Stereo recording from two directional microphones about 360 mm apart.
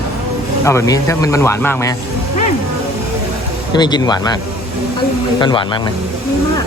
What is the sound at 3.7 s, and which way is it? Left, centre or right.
Speech, centre.